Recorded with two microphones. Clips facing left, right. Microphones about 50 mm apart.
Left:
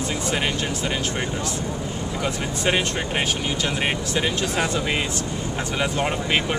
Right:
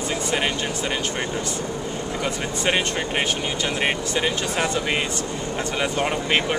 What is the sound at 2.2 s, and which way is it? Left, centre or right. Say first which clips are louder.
Speech: left 1 dB; centre.